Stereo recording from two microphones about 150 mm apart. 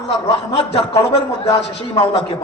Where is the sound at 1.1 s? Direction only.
40° left (ahead or behind).